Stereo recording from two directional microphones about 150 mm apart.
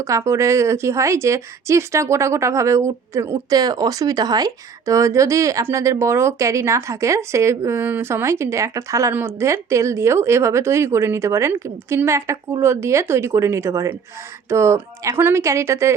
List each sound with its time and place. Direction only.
0.0 s a woman's voice: 20° right (ahead or behind)